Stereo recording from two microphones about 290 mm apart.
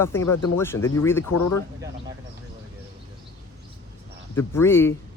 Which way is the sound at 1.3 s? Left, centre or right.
Left.